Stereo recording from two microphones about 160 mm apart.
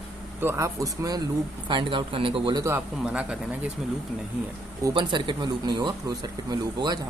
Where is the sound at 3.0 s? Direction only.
5° right (ahead or behind).